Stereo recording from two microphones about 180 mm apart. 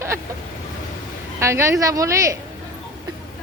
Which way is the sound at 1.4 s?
15° right (ahead or behind).